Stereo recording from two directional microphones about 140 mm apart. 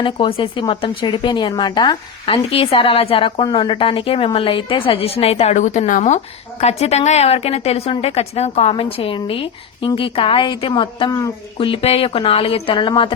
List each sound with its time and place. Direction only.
0.0 s a woman's voice: 40° left (ahead or behind)